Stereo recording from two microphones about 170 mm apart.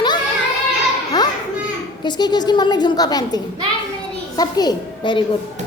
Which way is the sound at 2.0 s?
25° left (ahead or behind).